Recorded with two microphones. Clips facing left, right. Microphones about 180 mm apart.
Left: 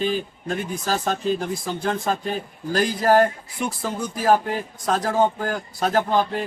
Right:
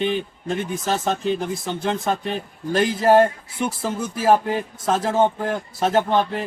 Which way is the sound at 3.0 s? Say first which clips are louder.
Right 2 dB; 25° right (ahead or behind).